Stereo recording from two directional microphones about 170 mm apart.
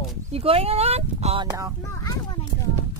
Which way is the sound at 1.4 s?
20° right (ahead or behind).